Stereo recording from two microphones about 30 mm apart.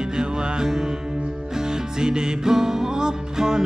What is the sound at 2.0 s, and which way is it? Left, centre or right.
Music, right.